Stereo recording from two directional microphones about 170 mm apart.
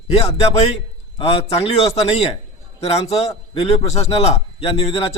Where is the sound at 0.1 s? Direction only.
35° left (ahead or behind).